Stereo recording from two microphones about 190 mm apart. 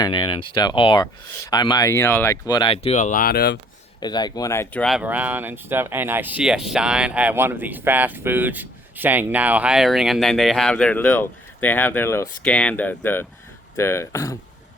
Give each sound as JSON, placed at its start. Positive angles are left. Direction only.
{"t": 0.0, "sound": "speech", "side_deg": 25}
{"t": 4.0, "sound": "speech", "side_deg": 20}